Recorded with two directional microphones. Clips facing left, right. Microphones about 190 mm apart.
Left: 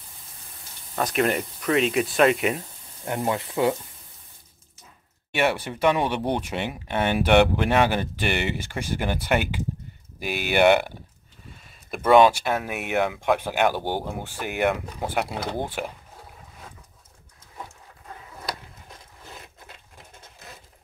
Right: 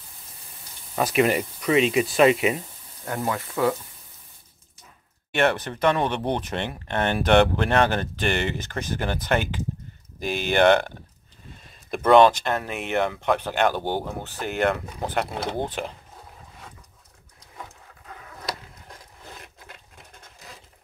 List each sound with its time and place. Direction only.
0.9 s speech: 5° right (ahead or behind)
3.1 s speech: 20° left (ahead or behind)
5.3 s speech: 5° left (ahead or behind)
11.9 s speech: 5° left (ahead or behind)